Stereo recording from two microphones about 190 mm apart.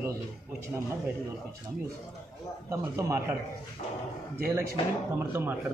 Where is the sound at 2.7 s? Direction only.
15° right (ahead or behind).